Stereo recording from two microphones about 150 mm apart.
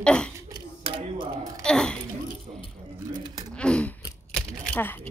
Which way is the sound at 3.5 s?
5° left (ahead or behind).